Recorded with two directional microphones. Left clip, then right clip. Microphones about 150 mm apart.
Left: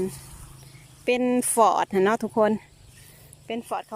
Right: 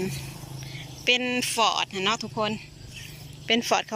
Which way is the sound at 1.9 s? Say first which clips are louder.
Left 4 dB; 35° left (ahead or behind).